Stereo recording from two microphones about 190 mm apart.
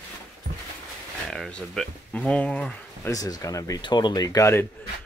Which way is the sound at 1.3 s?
Centre (ahead or behind).